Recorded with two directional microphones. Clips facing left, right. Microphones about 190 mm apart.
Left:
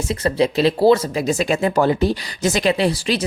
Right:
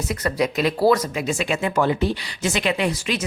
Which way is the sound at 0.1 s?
25° left (ahead or behind).